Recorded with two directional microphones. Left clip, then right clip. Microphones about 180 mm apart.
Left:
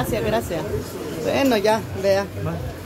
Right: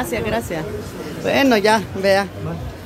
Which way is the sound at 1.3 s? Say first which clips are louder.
Right 4 dB; 15° right (ahead or behind).